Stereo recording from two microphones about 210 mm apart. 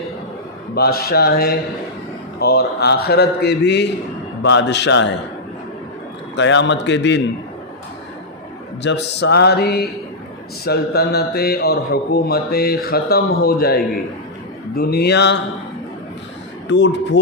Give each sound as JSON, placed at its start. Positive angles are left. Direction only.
{"t": 0.8, "sound": "a man's voice", "side_deg": 45}
{"t": 6.3, "sound": "a man's voice", "side_deg": 60}
{"t": 8.8, "sound": "speech", "side_deg": 55}
{"t": 16.6, "sound": "a man's voice", "side_deg": 55}